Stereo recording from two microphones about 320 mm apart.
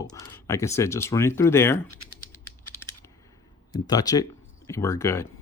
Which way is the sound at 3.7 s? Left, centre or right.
Centre.